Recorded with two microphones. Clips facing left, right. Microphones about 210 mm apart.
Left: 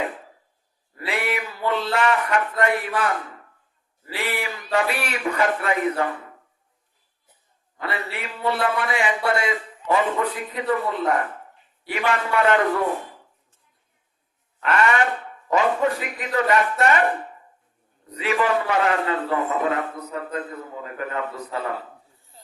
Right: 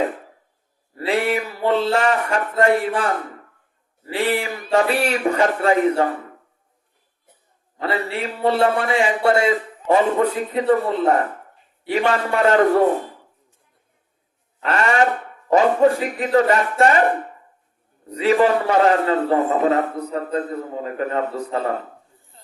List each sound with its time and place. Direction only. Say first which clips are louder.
0.9 s a man's voice: right 6 dB; 30° right (ahead or behind)
7.8 s a man's voice: right 6 dB; 30° right (ahead or behind)
14.6 s a sound: right 2 dB; 30° right (ahead or behind)
15.9 s a man's voice: right 8 dB; 30° right (ahead or behind)
18.0 s a man's voice: right 7 dB; 30° right (ahead or behind)